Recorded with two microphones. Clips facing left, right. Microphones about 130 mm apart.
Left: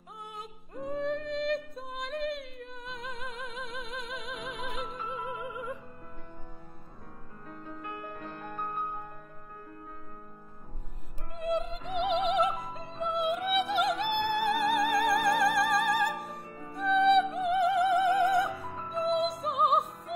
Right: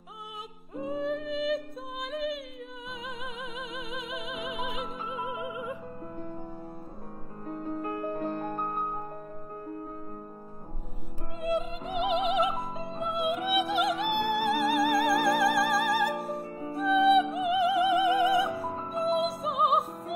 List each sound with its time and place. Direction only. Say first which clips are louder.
0.7 s music: right 1 dB; centre (ahead or behind)
7.4 s music: right 9 dB; 40° right (ahead or behind)
11.3 s music: right 1 dB; centre (ahead or behind)
18.5 s music: right 4 dB; 30° right (ahead or behind)
19.4 s music: right 1 dB; centre (ahead or behind)